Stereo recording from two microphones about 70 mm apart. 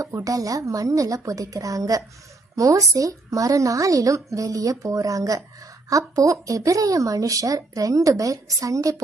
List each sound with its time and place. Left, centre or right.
0.0 s a woman's voice: right